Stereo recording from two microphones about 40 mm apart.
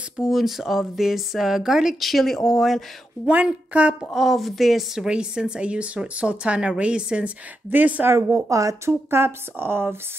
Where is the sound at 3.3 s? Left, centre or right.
Right.